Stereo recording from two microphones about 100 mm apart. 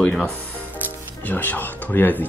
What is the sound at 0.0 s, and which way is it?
Speech, 10° left (ahead or behind).